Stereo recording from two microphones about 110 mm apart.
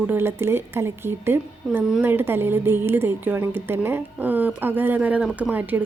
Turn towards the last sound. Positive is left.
turn(degrees=-15)  # may be behind; listen again after turning